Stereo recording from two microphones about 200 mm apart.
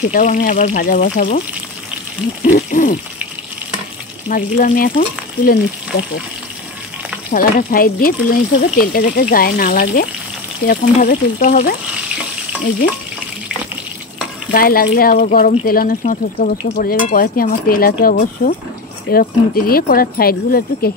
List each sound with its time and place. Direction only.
0.1 s speech: 40° left (ahead or behind)
2.4 s speech: 40° left (ahead or behind)
4.3 s speech: 45° left (ahead or behind)
7.3 s speech: 45° left (ahead or behind)
14.5 s speech: 45° left (ahead or behind)